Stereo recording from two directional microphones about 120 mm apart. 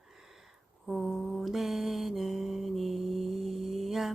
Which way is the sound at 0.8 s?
Centre (ahead or behind).